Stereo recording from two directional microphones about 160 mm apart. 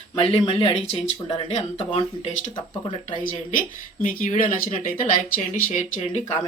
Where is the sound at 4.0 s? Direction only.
55° left (ahead or behind).